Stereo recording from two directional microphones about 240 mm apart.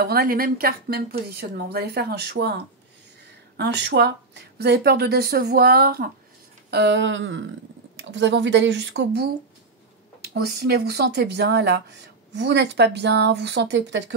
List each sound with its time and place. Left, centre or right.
0.0 s a woman's voice: right
3.9 s a woman's voice: right
10.3 s speech: right